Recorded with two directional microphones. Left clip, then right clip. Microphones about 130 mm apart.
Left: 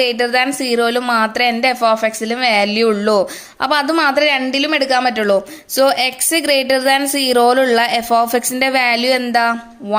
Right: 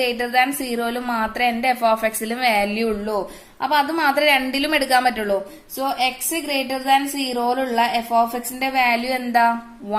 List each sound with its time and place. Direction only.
0.0 s speech: 40° left (ahead or behind)
2.7 s speech: 60° left (ahead or behind); by 5.3 s 40° left (ahead or behind)
5.3 s speech: 80° left; by 10.0 s 45° left (ahead or behind)